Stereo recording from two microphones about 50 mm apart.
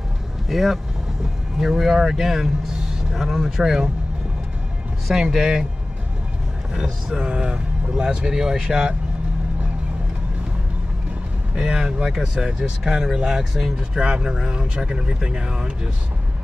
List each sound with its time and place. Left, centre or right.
0.5 s speech: centre
5.0 s speech: centre
6.7 s speech: centre
11.5 s speech: centre
13.7 s speech: centre